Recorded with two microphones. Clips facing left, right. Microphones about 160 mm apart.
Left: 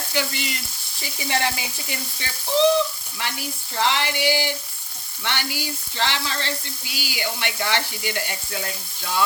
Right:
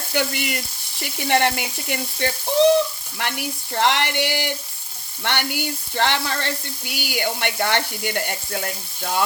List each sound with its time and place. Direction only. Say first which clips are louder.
0.1 s frying: right 4 dB; 55° right (ahead or behind)